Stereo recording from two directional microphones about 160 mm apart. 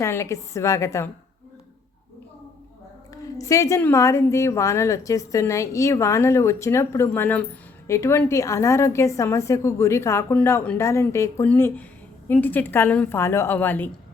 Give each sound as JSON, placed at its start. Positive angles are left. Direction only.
{"t": 0.0, "sound": "a woman's voice", "side_deg": 15}
{"t": 3.3, "sound": "a woman's voice", "side_deg": 20}